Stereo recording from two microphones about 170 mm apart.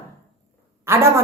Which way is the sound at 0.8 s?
15° right (ahead or behind).